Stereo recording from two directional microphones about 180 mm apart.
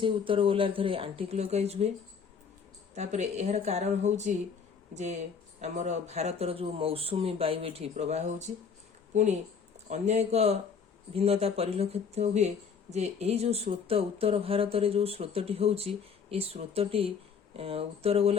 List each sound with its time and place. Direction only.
0.0 s speech: 30° right (ahead or behind)
2.9 s speech: 40° right (ahead or behind)